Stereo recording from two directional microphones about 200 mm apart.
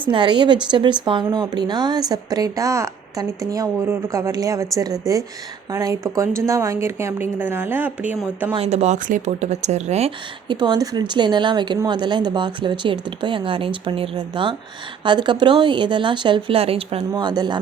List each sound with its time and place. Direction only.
0.1 s a woman's voice: 25° right (ahead or behind); by 8.5 s 10° right (ahead or behind)
8.5 s speech: 30° right (ahead or behind)
10.5 s a woman's voice: 20° right (ahead or behind)